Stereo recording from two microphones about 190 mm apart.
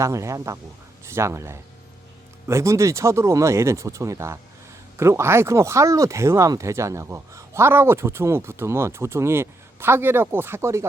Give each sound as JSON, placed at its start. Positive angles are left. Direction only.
{"t": 0.0, "sound": "speech", "side_deg": -15}